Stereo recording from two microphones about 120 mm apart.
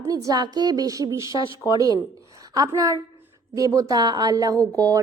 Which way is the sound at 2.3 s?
30° right (ahead or behind).